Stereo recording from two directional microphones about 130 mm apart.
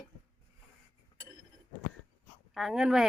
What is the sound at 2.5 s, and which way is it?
Speech, 5° right (ahead or behind).